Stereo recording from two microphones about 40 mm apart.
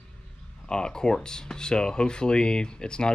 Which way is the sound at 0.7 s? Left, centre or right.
Centre.